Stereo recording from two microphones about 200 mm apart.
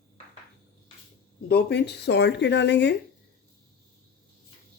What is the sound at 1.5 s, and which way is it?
Speech, 55° left (ahead or behind).